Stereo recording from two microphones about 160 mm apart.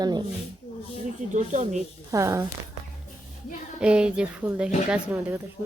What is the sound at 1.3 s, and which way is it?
Speech, 50° right (ahead or behind).